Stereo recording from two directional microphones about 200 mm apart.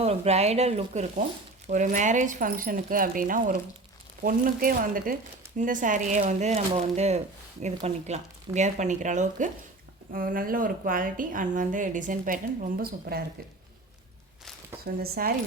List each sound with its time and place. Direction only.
0.0 s a woman's voice: 30° right (ahead or behind); by 13.2 s 50° right (ahead or behind)
14.8 s a woman's voice: 50° right (ahead or behind)